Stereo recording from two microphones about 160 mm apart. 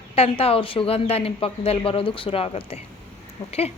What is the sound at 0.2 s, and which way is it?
Speech, 35° left (ahead or behind).